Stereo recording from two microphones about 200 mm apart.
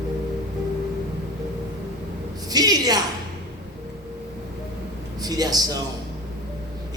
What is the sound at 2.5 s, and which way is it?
Speech, 20° right (ahead or behind).